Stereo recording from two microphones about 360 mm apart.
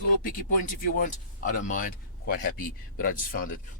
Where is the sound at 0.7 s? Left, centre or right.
Left.